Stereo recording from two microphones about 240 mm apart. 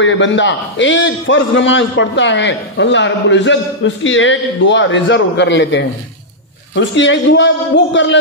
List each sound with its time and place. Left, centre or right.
0.0 s a man's voice: left